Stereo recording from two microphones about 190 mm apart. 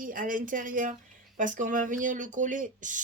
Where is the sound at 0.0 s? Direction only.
45° right (ahead or behind).